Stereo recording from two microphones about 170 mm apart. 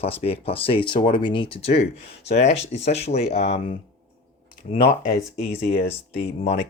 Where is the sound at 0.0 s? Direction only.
35° left (ahead or behind).